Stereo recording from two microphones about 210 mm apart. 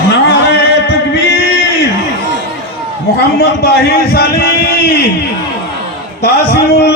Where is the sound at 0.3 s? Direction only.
50° left (ahead or behind).